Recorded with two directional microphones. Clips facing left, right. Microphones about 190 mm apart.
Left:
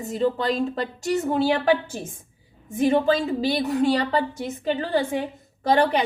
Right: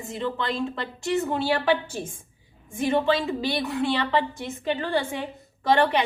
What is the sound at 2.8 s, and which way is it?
A woman's voice, 45° left (ahead or behind).